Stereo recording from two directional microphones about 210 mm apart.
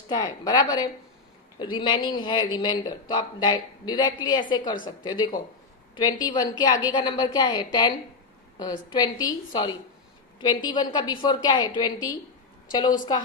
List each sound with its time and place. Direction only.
0.1 s speech: 20° left (ahead or behind)